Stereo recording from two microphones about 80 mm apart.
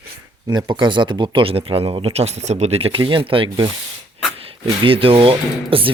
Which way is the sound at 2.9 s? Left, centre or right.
Right.